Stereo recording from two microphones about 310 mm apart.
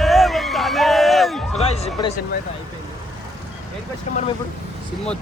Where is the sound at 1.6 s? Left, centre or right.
Centre.